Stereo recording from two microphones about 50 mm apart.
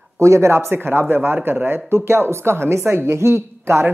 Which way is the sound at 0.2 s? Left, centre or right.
Right.